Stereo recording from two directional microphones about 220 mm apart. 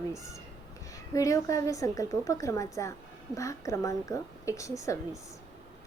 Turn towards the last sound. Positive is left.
turn(degrees=15)  # may be behind; listen again after turning